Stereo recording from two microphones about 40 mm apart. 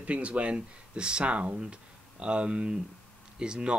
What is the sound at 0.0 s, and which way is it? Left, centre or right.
Speech, right.